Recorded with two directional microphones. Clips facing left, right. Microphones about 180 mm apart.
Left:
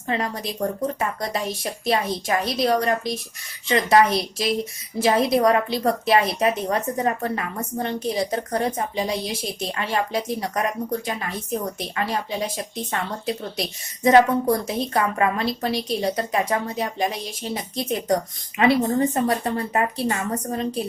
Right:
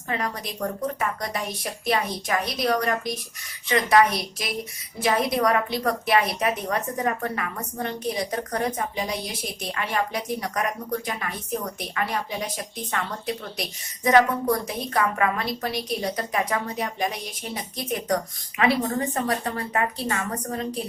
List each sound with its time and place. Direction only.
0.1 s a woman's voice: 30° left (ahead or behind)